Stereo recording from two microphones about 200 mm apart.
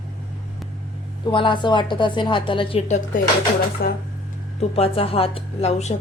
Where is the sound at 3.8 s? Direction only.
50° left (ahead or behind).